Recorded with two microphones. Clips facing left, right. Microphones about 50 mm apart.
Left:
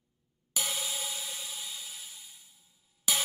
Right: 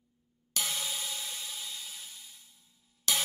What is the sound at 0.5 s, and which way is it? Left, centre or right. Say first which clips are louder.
Music: even; centre.